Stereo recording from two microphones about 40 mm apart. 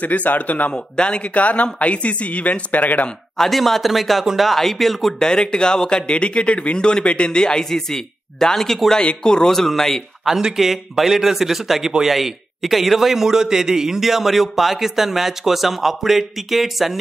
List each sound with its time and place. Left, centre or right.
0.0 s speech: left
0.7 s speech: left
1.3 s speech: left
3.3 s a man's voice: centre
5.2 s speech: centre
8.9 s speech: centre
10.5 s a man's voice: centre